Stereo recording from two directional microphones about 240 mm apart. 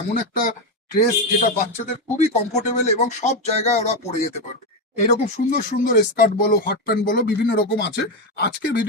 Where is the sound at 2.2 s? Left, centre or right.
Left.